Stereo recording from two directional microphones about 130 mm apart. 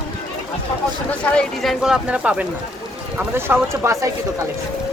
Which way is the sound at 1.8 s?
5° right (ahead or behind).